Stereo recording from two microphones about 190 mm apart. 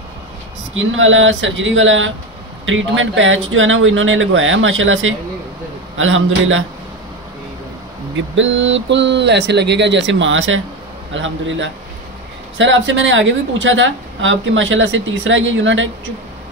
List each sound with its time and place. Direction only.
0.7 s speech: 90° right
8.4 s speech: 80° right
11.1 s speech: 80° right